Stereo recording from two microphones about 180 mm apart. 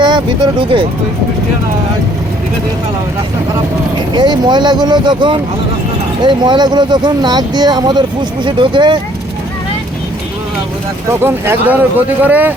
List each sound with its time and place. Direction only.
0.0 s speech: 25° right (ahead or behind)
4.1 s speech: 25° right (ahead or behind)
11.2 s speech: 10° right (ahead or behind)